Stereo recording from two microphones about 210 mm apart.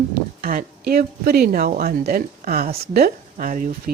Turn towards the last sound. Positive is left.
turn(degrees=-40)  # may be behind; listen again after turning